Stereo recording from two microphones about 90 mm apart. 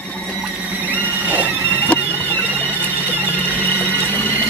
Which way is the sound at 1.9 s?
20° left (ahead or behind).